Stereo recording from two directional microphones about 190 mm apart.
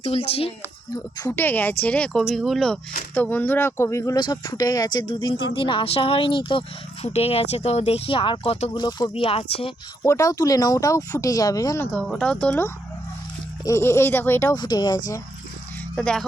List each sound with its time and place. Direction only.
0.0 s a woman's voice: 30° left (ahead or behind)
1.2 s speech: 10° left (ahead or behind); by 9.7 s 30° left (ahead or behind)
10.0 s speech: 15° left (ahead or behind)
12.0 s speech: 5° left (ahead or behind); by 15.2 s 20° left (ahead or behind)
16.0 s speech: 5° left (ahead or behind)